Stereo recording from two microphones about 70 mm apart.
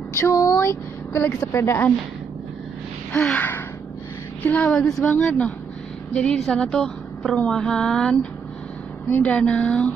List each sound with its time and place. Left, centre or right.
0.1 s a woman's voice: left
3.3 s a woman's voice: left
4.6 s a woman's voice: centre
5.0 s a woman's voice: centre